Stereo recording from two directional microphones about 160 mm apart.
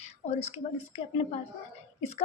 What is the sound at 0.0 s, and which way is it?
A woman's voice, 40° left (ahead or behind).